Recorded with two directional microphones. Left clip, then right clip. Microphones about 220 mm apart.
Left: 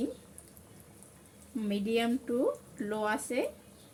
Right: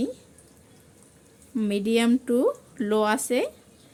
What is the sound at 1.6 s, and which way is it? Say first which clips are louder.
Speech: right 7 dB; 50° right (ahead or behind).